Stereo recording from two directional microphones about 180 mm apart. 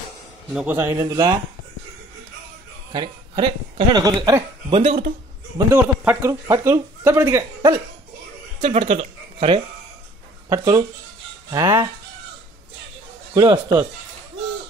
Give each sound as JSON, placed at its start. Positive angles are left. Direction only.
{"t": 0.5, "sound": "a man's voice", "side_deg": -5}
{"t": 0.7, "sound": "speech", "side_deg": -15}
{"t": 2.9, "sound": "speech", "side_deg": -25}
{"t": 8.5, "sound": "speech", "side_deg": -40}
{"t": 10.5, "sound": "speech", "side_deg": -20}
{"t": 13.3, "sound": "speech", "side_deg": -15}